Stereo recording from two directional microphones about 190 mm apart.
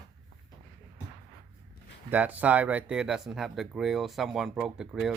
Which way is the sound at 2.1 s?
10° right (ahead or behind).